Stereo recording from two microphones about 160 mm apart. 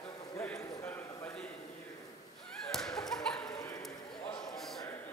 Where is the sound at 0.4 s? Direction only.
5° left (ahead or behind).